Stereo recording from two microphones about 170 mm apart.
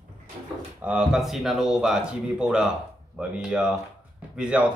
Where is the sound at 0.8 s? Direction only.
5° right (ahead or behind).